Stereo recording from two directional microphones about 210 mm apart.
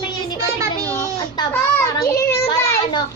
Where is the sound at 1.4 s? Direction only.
15° left (ahead or behind).